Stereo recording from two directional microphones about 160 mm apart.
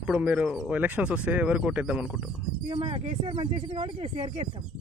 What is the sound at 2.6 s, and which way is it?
Speech, 30° right (ahead or behind).